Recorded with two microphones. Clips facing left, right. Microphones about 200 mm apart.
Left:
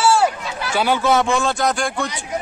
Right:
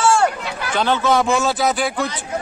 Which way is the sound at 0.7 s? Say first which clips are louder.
Even; 10° left (ahead or behind).